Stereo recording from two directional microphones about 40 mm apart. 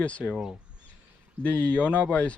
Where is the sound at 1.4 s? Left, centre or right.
Left.